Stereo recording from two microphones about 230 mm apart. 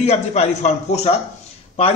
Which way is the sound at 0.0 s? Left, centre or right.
Left.